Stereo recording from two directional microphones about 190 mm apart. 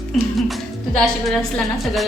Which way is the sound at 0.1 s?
Centre (ahead or behind).